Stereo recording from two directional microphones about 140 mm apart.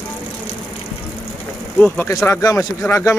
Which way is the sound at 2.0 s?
20° left (ahead or behind).